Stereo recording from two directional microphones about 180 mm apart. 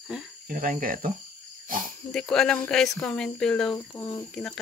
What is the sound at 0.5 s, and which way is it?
Speech, 50° right (ahead or behind).